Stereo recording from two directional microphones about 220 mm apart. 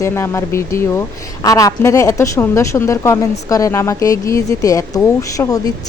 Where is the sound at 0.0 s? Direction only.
10° left (ahead or behind).